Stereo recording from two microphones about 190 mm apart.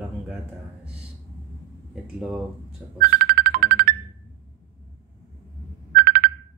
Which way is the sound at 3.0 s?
55° right (ahead or behind).